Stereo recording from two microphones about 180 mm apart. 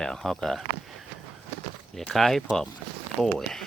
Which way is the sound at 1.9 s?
Centre (ahead or behind).